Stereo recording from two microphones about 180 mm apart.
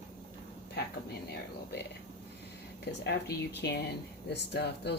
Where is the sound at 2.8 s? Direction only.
65° left (ahead or behind).